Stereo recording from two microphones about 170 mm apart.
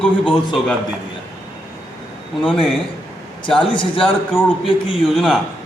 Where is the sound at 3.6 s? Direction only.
30° left (ahead or behind).